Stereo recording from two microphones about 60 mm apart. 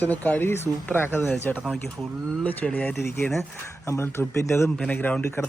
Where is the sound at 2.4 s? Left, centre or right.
Left.